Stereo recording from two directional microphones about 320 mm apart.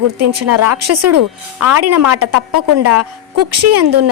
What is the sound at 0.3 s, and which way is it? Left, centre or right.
A woman's voice, right.